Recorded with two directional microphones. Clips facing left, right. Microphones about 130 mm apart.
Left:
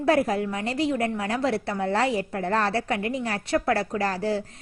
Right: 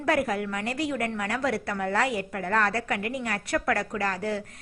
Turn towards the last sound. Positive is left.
turn(degrees=30)  # may be behind; listen again after turning